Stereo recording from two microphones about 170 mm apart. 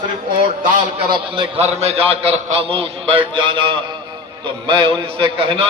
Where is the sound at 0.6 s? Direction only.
50° right (ahead or behind).